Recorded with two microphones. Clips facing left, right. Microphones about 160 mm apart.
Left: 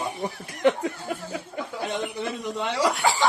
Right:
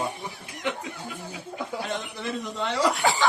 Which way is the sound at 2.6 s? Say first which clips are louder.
Even; 15° left (ahead or behind).